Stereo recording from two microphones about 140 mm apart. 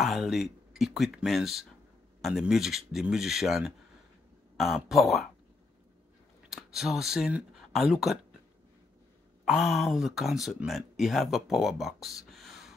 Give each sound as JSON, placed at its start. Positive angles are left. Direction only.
{"t": 0.0, "sound": "speech", "side_deg": 0}
{"t": 6.5, "sound": "speech", "side_deg": 0}
{"t": 9.4, "sound": "speech", "side_deg": -5}